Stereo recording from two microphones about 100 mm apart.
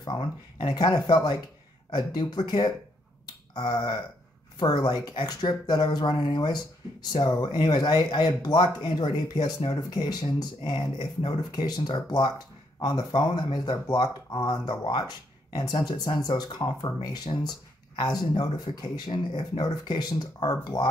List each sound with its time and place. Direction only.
0.0 s speech: 55° left (ahead or behind)
9.7 s speech: 40° left (ahead or behind)
10.6 s speech: 55° left (ahead or behind)
13.3 s speech: 45° left (ahead or behind)
19.6 s speech: 45° left (ahead or behind)